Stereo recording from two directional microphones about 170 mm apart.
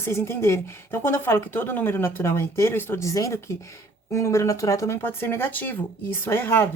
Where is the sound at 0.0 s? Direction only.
15° left (ahead or behind).